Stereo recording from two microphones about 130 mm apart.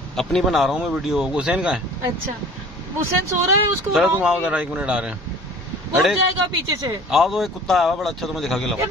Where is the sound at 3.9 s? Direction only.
5° right (ahead or behind).